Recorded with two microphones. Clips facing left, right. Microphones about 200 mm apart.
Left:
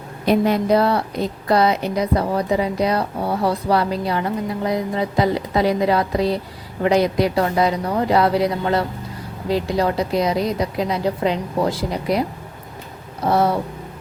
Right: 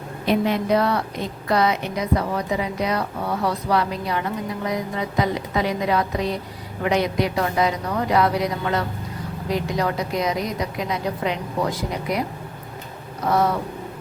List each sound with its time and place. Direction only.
0.3 s a woman's voice: 40° left (ahead or behind)
13.2 s speech: 30° left (ahead or behind)